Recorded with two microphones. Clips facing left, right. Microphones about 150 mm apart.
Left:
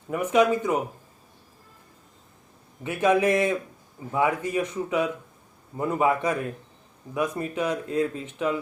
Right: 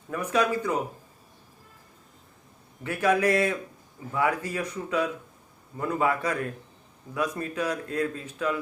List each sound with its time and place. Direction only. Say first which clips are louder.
0.1 s a man's voice: left 4 dB; 20° left (ahead or behind)
2.8 s a man's voice: left 2 dB; 20° left (ahead or behind)